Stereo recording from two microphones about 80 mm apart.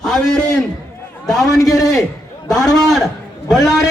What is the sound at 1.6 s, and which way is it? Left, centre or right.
Speech, left.